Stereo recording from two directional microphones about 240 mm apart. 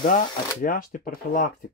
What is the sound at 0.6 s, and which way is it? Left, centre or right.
Speech, left.